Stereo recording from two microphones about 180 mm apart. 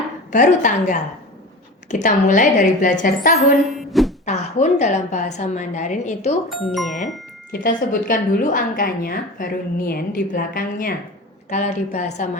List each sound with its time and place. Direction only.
0.3 s a woman's voice: 45° left (ahead or behind)
3.8 s a sound: centre (ahead or behind)
4.3 s a woman's voice: 40° left (ahead or behind)
6.7 s speech: centre (ahead or behind)
7.5 s a woman's voice: 50° left (ahead or behind)
11.4 s a woman's voice: 40° left (ahead or behind)